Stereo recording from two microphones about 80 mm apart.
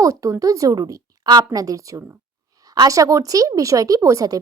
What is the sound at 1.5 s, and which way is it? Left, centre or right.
A woman's voice, right.